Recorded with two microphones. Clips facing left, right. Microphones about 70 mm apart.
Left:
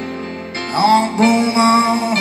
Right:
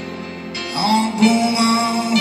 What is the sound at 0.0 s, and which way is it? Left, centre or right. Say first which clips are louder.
Music: left 4 dB; left.